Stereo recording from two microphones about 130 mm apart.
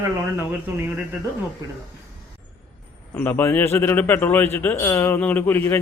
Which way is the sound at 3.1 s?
15° left (ahead or behind).